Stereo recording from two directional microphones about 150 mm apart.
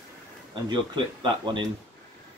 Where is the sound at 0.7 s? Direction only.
30° right (ahead or behind).